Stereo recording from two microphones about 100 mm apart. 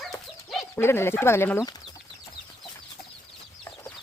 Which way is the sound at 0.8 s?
25° left (ahead or behind).